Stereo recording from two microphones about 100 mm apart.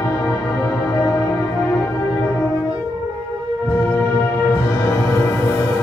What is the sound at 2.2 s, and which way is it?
French horn, 25° left (ahead or behind).